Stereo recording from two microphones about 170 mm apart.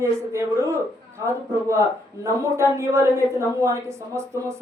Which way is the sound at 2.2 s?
15° right (ahead or behind).